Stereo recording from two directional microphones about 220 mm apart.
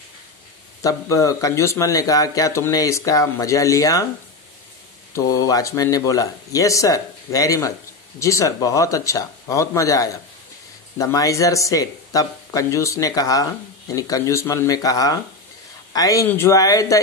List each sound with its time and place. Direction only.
0.8 s speech: 15° left (ahead or behind)
5.1 s speech: 15° left (ahead or behind)